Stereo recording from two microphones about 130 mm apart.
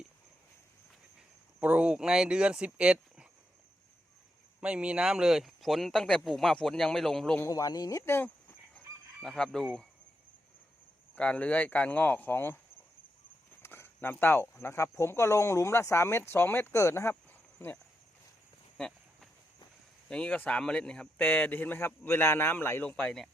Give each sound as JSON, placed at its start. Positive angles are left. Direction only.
{"t": 1.6, "sound": "speech", "side_deg": -10}
{"t": 4.6, "sound": "speech", "side_deg": -10}
{"t": 7.3, "sound": "speech", "side_deg": 25}
{"t": 9.2, "sound": "speech", "side_deg": 5}
{"t": 11.1, "sound": "speech", "side_deg": 10}
{"t": 13.6, "sound": "a sound", "side_deg": 20}
{"t": 14.6, "sound": "speech", "side_deg": 20}
{"t": 18.8, "sound": "a sound", "side_deg": 5}
{"t": 20.1, "sound": "speech", "side_deg": 5}